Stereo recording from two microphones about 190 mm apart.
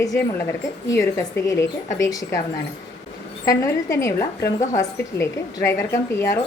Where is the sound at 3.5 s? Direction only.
15° left (ahead or behind).